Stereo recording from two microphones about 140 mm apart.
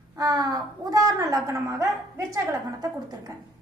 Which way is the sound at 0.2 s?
30° right (ahead or behind).